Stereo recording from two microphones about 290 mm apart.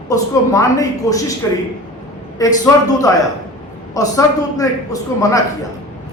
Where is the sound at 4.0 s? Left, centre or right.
Centre.